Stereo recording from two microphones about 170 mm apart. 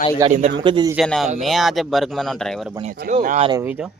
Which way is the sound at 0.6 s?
25° right (ahead or behind).